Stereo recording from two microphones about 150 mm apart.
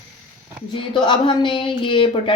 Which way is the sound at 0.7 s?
30° left (ahead or behind).